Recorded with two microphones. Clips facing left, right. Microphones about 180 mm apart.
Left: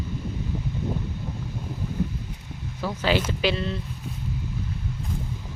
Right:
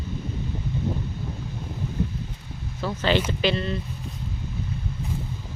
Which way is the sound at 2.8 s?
5° left (ahead or behind).